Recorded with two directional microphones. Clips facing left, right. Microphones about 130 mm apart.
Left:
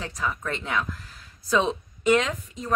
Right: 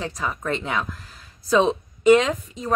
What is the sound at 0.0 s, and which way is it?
A woman's voice, 30° right (ahead or behind).